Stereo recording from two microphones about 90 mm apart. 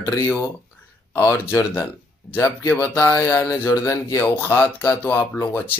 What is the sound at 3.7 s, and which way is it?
Speech, 40° left (ahead or behind).